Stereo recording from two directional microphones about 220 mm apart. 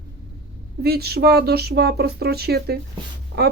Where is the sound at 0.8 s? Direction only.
45° right (ahead or behind).